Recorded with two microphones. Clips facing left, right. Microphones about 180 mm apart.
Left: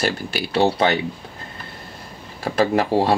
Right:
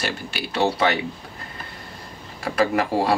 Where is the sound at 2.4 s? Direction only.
30° left (ahead or behind).